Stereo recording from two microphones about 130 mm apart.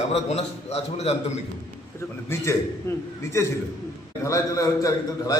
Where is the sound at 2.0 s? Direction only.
20° left (ahead or behind).